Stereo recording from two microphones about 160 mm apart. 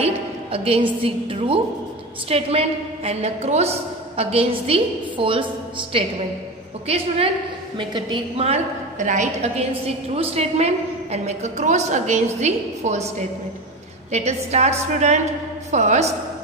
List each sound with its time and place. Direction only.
0.0 s a woman's voice: 35° right (ahead or behind)
14.1 s a woman's voice: 45° right (ahead or behind)